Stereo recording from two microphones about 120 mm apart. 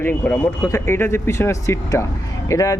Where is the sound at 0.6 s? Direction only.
25° left (ahead or behind).